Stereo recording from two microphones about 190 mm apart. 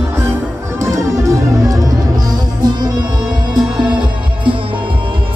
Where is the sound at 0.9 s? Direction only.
15° right (ahead or behind).